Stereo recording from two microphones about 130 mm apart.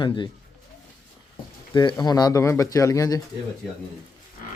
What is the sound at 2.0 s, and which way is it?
Speech, 30° left (ahead or behind).